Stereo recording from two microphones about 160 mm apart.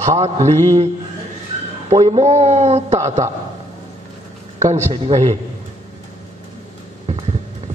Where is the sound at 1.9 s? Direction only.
25° right (ahead or behind).